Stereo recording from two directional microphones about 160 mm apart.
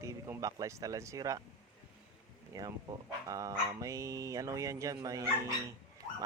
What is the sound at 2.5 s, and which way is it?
Speech, 20° right (ahead or behind).